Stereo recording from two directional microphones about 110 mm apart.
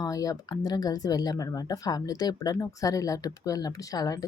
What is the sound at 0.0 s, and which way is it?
Speech, 30° left (ahead or behind).